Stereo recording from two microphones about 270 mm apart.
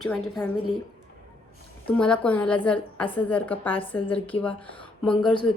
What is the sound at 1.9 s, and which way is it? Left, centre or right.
A woman's voice, centre.